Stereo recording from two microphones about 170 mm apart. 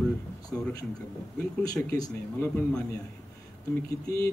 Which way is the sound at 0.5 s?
10° left (ahead or behind).